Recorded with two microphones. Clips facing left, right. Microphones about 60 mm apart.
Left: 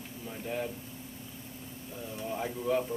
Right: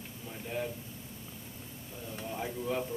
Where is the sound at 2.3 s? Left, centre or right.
Centre.